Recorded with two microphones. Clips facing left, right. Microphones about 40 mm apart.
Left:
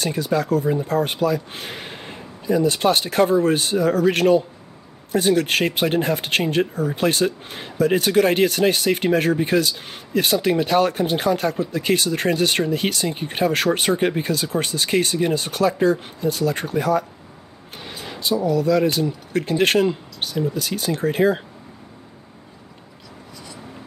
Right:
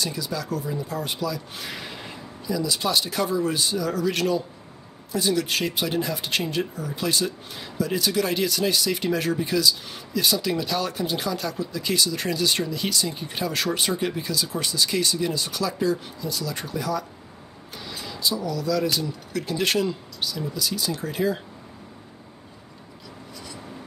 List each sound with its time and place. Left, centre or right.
0.0 s speech: left
18.0 s speech: left